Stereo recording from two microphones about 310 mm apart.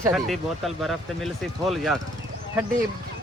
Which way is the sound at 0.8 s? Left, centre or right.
Centre.